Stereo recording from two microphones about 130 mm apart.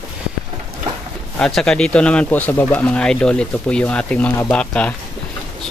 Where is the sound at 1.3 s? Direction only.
5° left (ahead or behind).